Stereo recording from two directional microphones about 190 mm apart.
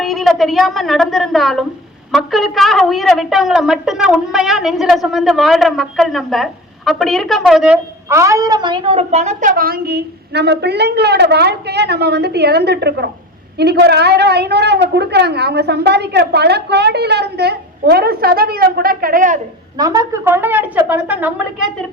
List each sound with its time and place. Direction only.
0.0 s a woman's voice: centre (ahead or behind)
8.0 s a woman's voice: 15° right (ahead or behind); by 19.4 s 45° right (ahead or behind)
19.7 s speech: 20° right (ahead or behind)